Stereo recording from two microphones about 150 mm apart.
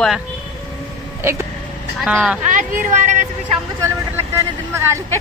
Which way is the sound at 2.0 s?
5° right (ahead or behind).